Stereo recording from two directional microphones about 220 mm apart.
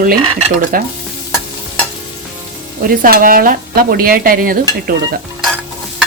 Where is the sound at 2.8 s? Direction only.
40° right (ahead or behind).